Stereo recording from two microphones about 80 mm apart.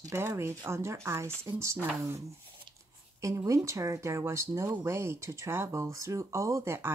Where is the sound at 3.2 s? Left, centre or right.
Right.